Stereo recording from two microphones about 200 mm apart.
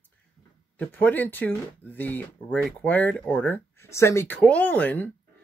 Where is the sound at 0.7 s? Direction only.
10° left (ahead or behind).